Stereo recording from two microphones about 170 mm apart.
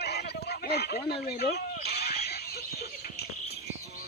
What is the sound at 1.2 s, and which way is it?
Speech, 65° left (ahead or behind).